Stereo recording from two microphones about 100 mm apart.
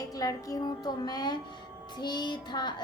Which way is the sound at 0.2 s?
35° left (ahead or behind).